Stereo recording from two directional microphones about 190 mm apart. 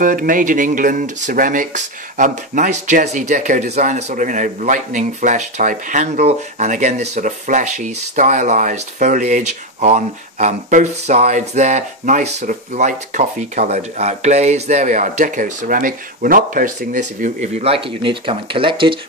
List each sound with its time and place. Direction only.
0.0 s speech: 45° right (ahead or behind); by 18.9 s 25° right (ahead or behind)